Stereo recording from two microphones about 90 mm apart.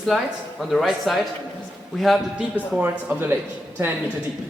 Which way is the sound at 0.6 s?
Centre (ahead or behind).